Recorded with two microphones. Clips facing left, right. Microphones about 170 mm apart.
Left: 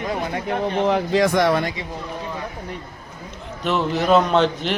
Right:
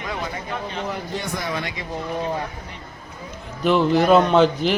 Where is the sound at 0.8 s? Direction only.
90° left.